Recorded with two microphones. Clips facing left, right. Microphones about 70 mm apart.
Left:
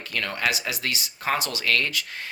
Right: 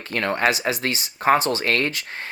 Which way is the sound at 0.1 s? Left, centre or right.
Right.